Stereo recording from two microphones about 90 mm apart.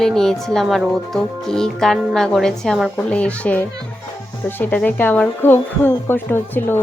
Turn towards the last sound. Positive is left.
turn(degrees=25)  # may be behind; listen again after turning